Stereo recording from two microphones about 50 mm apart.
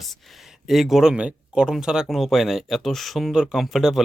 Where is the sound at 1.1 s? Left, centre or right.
Right.